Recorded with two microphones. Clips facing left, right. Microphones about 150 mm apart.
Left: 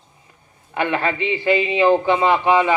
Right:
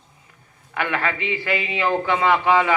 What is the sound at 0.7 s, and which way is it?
Speech, 25° left (ahead or behind).